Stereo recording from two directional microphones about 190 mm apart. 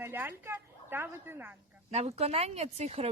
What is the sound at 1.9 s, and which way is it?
Speech, 35° right (ahead or behind).